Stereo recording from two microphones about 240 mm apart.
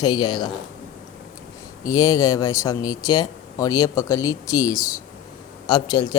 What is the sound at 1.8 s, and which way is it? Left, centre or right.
Speech, centre.